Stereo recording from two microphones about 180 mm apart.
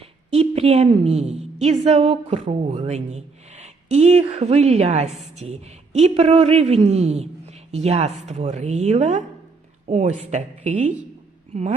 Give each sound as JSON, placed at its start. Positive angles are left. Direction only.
{"t": 0.3, "sound": "a woman's voice", "side_deg": -35}